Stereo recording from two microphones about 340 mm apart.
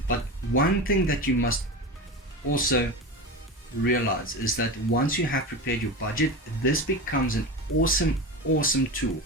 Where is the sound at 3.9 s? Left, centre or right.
Left.